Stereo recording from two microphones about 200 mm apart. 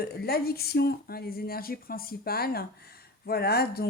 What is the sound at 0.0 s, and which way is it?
Speech, 50° left (ahead or behind).